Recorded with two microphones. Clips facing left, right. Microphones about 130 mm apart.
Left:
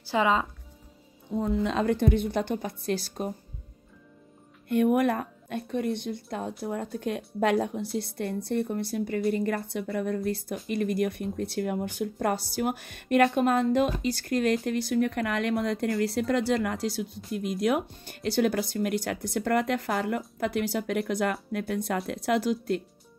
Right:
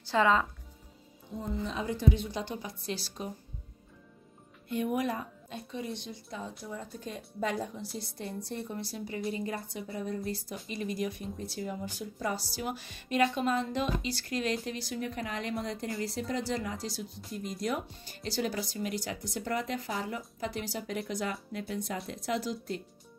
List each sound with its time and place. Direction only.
0.1 s speech: 15° left (ahead or behind)
1.4 s speech: 75° left (ahead or behind); by 3.3 s 50° left (ahead or behind)
4.6 s speech: 60° left (ahead or behind)